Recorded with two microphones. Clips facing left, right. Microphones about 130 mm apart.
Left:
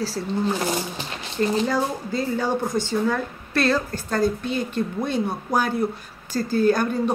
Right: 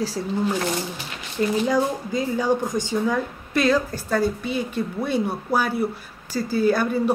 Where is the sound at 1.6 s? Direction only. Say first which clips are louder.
Right 2 dB; 15° right (ahead or behind).